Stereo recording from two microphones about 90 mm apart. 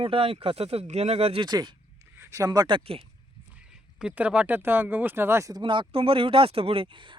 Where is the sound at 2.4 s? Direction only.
45° right (ahead or behind).